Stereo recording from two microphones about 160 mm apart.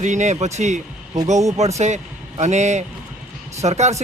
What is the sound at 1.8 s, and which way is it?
A man's voice, 45° right (ahead or behind).